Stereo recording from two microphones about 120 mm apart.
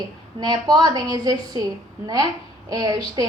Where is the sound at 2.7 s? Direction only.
35° right (ahead or behind).